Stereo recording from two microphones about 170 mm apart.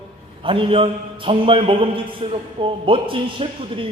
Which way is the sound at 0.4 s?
30° right (ahead or behind).